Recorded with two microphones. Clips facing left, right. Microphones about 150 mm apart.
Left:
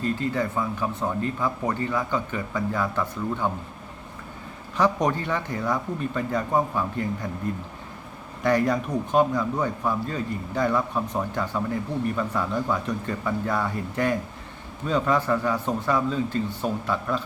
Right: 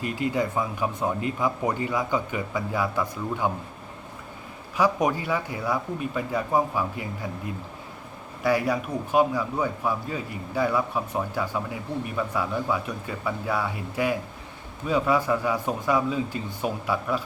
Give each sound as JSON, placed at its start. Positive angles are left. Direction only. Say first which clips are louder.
{"t": 0.0, "sound": "a man's voice", "louder": "even", "side_deg": -15}
{"t": 4.8, "sound": "a man's voice", "louder": "even", "side_deg": -10}